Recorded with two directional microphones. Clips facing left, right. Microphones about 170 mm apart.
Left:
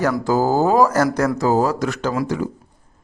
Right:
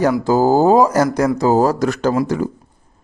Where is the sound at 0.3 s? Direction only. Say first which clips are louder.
Right 4 dB; 30° right (ahead or behind); by 1.3 s 15° right (ahead or behind).